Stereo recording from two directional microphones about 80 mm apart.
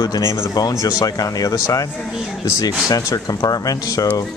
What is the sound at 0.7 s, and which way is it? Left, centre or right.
Speech, left.